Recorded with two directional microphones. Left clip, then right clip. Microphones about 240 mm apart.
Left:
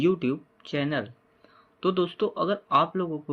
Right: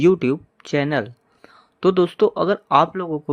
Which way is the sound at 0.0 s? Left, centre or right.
Right.